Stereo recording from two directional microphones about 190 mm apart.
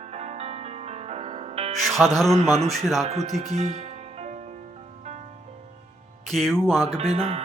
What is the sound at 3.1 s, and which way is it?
Speech, 35° right (ahead or behind).